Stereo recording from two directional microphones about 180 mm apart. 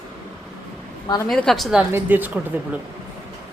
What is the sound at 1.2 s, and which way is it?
A woman's voice, 5° left (ahead or behind).